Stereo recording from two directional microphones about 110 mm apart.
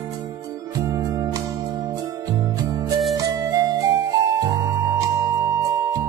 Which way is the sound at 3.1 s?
35° right (ahead or behind).